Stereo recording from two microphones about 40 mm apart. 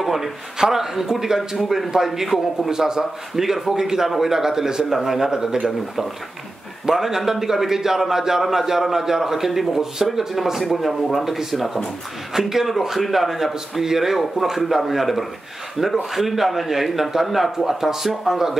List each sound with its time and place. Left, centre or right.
0.0 s a man's voice: centre
2.7 s a man's voice: centre
6.9 s a man's voice: centre
12.4 s a man's voice: centre